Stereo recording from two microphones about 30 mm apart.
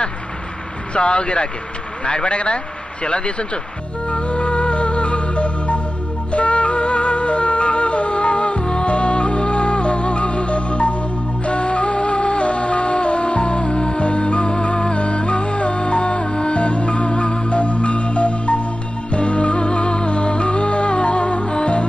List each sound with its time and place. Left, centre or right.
0.9 s speech: left
4.1 s music: left